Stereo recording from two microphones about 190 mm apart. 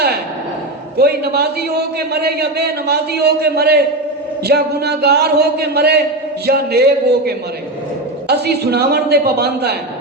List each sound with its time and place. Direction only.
0.9 s a man's voice: 55° right (ahead or behind)